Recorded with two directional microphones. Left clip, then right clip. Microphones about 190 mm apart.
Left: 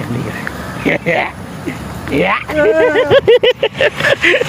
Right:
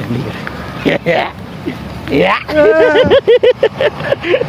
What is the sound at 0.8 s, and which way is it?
Speech, 25° right (ahead or behind).